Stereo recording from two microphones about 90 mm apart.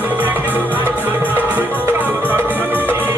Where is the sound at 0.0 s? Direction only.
20° right (ahead or behind).